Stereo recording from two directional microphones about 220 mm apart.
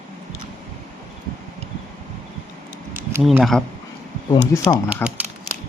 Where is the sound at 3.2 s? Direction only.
Centre (ahead or behind).